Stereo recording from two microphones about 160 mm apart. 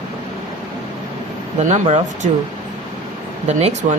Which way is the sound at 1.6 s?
50° right (ahead or behind).